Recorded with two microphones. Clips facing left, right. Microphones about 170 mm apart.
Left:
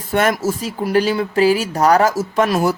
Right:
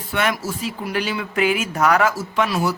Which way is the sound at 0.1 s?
45° left (ahead or behind).